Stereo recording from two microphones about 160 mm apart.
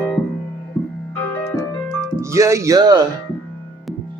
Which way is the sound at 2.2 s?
20° right (ahead or behind).